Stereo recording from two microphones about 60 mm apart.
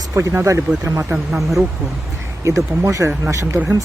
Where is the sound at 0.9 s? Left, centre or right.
Right.